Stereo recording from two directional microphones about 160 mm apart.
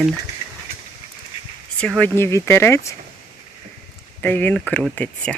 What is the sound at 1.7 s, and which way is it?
Speech, 5° left (ahead or behind).